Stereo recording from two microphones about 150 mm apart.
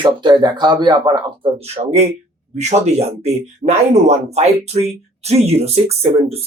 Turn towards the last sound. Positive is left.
turn(degrees=-45)  # may be behind; listen again after turning